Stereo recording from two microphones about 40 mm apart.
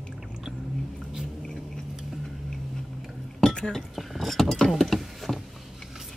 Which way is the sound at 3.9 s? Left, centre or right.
Centre.